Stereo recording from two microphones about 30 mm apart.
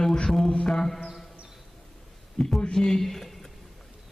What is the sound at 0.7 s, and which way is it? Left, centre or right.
Speech, centre.